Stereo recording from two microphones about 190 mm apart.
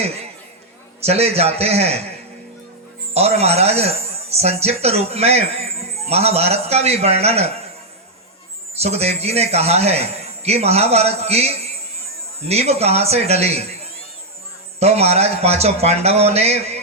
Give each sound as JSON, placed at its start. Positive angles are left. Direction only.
{"t": 1.0, "sound": "a man's voice", "side_deg": -35}
{"t": 3.2, "sound": "a man's voice", "side_deg": -35}
{"t": 8.8, "sound": "a man's voice", "side_deg": -35}
{"t": 14.8, "sound": "a man's voice", "side_deg": -35}